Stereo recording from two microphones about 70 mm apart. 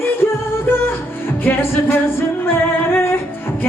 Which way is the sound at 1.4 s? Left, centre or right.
Left.